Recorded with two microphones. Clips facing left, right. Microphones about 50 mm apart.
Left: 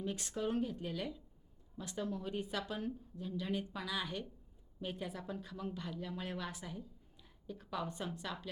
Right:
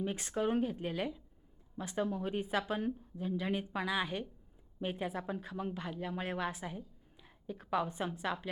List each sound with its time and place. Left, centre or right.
0.0 s a woman's voice: right